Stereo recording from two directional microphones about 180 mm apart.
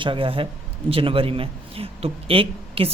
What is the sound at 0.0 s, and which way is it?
A man's voice, 30° right (ahead or behind).